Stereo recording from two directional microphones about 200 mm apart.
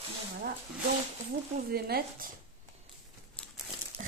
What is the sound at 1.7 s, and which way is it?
Speech, 50° right (ahead or behind).